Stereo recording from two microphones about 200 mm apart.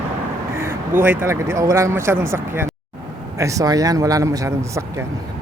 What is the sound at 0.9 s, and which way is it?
Speech, 10° right (ahead or behind).